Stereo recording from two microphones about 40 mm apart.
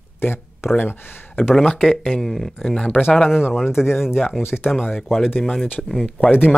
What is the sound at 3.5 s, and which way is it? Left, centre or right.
Speech, centre.